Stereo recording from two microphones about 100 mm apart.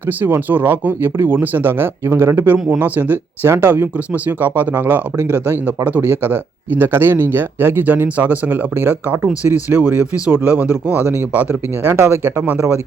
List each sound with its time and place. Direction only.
0.2 s speech: 20° right (ahead or behind)
12.4 s speech: 10° right (ahead or behind)